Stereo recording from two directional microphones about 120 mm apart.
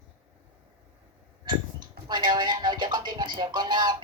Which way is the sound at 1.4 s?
40° right (ahead or behind).